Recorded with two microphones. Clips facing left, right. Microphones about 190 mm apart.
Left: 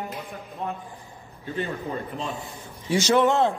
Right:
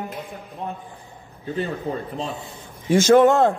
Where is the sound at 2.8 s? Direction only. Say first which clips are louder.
Right 6 dB; 50° right (ahead or behind).